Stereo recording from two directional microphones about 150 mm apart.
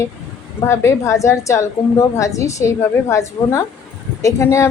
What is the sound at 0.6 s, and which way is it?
A woman's voice, 20° left (ahead or behind).